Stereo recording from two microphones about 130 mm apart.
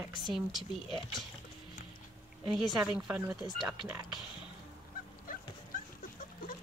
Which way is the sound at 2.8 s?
15° right (ahead or behind).